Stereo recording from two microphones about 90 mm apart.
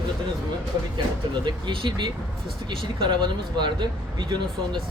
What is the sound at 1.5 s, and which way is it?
Speech, 60° right (ahead or behind).